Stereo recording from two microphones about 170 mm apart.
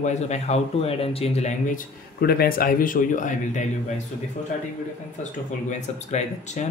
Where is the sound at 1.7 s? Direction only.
65° left (ahead or behind); by 4.0 s 45° left (ahead or behind).